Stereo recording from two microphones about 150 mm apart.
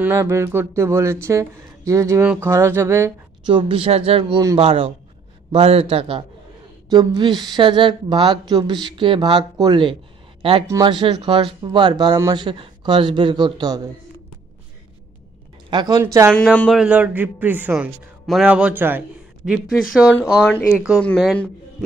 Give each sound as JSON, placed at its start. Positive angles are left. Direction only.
{"t": 0.0, "sound": "a man's voice", "side_deg": -15}
{"t": 3.4, "sound": "speech", "side_deg": -35}
{"t": 6.9, "sound": "speech", "side_deg": -30}
{"t": 15.7, "sound": "speech", "side_deg": -30}
{"t": 16.0, "sound": "a man's voice", "side_deg": -15}
{"t": 16.5, "sound": "speech", "side_deg": 5}
{"t": 16.8, "sound": "a man's voice", "side_deg": -10}
{"t": 19.5, "sound": "speech", "side_deg": 0}
{"t": 20.4, "sound": "speech", "side_deg": 10}
{"t": 20.7, "sound": "a man's voice", "side_deg": -5}